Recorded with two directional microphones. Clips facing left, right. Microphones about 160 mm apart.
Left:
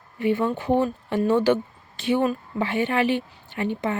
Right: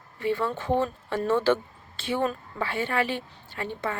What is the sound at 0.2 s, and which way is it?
A woman's voice, 15° left (ahead or behind).